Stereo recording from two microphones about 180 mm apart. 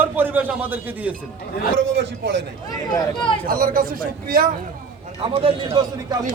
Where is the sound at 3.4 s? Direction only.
55° right (ahead or behind).